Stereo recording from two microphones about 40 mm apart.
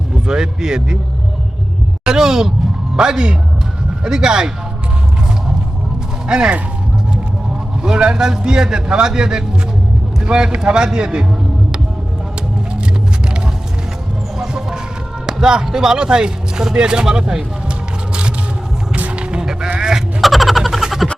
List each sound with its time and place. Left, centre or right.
0.3 s speech: centre
2.0 s a man's voice: centre
6.2 s speech: right
7.8 s speech: right
14.3 s chicken: centre
15.3 s speech: centre
18.1 s wild animals: right
19.1 s music: right
19.6 s sheep: right
20.2 s a sound: centre